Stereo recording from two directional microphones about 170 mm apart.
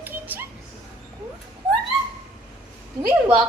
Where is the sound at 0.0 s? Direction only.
10° right (ahead or behind).